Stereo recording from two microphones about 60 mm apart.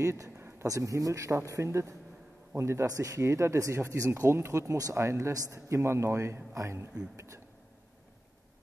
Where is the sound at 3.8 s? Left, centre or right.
Right.